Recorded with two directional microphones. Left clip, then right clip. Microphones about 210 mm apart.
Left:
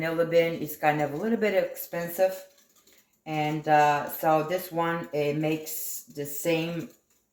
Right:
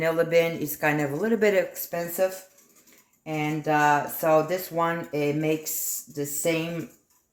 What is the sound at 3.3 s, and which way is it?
A man's voice, 45° right (ahead or behind).